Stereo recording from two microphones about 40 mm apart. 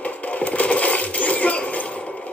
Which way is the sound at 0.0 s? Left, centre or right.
Left.